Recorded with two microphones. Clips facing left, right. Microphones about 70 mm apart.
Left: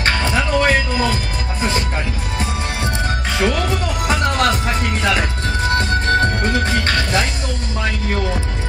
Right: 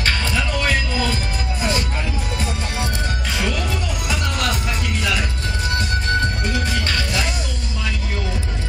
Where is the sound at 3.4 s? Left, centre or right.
Left.